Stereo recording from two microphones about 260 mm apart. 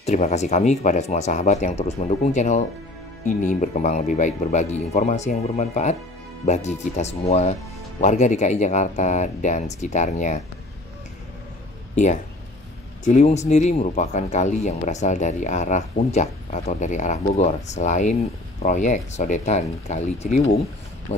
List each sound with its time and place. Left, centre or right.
0.0 s speech: left
11.9 s speech: left